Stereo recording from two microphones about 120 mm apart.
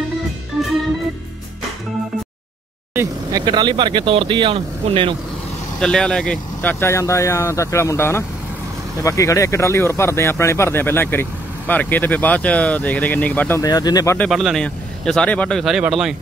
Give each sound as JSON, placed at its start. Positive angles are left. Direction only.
{"t": 3.4, "sound": "speech", "side_deg": -40}
{"t": 5.8, "sound": "speech", "side_deg": 5}
{"t": 13.6, "sound": "speech", "side_deg": 35}
{"t": 14.3, "sound": "speech", "side_deg": 0}